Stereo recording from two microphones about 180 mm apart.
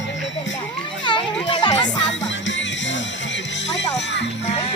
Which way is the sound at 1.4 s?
25° left (ahead or behind).